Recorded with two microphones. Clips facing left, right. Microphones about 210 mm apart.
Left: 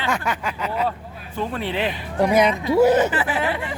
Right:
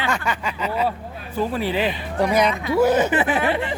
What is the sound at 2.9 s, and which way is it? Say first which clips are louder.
Speech: even; 15° right (ahead or behind).